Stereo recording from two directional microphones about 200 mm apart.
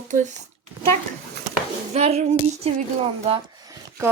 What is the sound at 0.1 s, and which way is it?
Speech, 40° right (ahead or behind).